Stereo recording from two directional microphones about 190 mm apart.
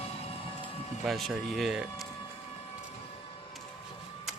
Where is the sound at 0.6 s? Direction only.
30° left (ahead or behind).